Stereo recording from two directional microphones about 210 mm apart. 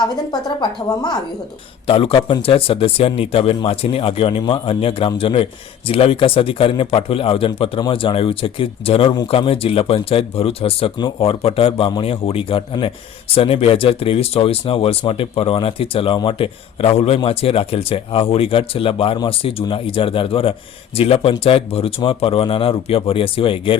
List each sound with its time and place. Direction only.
0.3 s speech: 20° left (ahead or behind)